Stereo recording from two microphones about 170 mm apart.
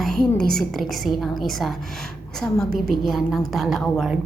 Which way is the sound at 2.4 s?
10° left (ahead or behind).